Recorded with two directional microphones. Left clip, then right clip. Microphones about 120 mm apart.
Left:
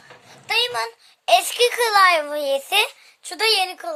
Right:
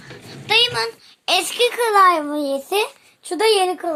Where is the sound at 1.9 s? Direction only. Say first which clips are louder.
Right 3 dB; 60° left (ahead or behind).